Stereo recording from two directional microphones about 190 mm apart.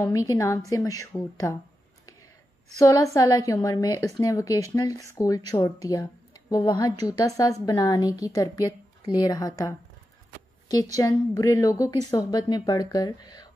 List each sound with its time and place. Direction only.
0.0 s a woman's voice: 15° left (ahead or behind)
2.8 s a woman's voice: 15° left (ahead or behind)
11.0 s a woman's voice: 15° left (ahead or behind)